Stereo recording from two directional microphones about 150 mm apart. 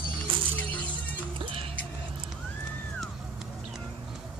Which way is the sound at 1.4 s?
35° right (ahead or behind).